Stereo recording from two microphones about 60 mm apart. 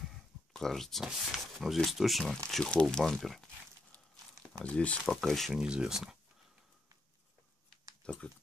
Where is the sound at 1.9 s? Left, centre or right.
Centre.